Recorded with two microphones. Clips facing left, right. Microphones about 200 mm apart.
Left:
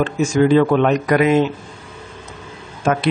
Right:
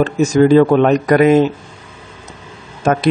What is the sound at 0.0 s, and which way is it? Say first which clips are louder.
A man's voice: right 4 dB; 40° right (ahead or behind).